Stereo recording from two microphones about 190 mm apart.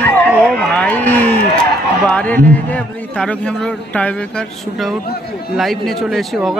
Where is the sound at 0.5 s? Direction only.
5° left (ahead or behind).